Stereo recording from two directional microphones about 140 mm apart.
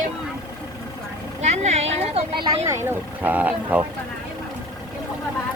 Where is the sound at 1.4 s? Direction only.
55° right (ahead or behind).